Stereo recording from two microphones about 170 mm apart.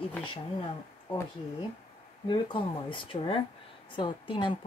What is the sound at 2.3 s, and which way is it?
A woman's voice, 30° left (ahead or behind).